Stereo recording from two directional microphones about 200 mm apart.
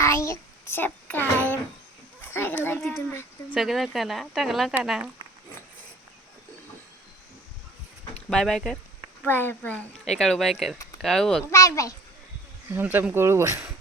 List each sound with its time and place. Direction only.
0.0 s child singing: 15° left (ahead or behind)
2.2 s a child's voice: 10° left (ahead or behind)
8.3 s speech: 5° left (ahead or behind)
11.5 s a child's voice: 15° left (ahead or behind)
12.7 s speech: 10° right (ahead or behind)